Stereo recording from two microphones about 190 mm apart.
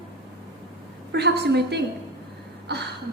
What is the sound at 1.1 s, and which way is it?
A woman's voice, 60° right (ahead or behind).